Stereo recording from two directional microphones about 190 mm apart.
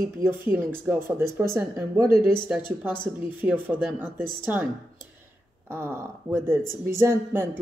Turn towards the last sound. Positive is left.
turn(degrees=-10)  # may be behind; listen again after turning